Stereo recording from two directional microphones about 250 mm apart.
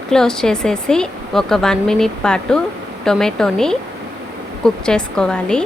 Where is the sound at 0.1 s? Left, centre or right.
Centre.